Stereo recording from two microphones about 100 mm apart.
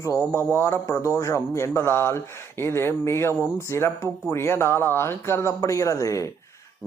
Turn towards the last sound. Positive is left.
turn(degrees=30)  # may be behind; listen again after turning